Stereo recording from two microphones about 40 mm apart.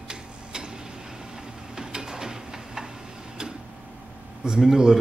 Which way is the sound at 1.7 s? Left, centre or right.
Centre.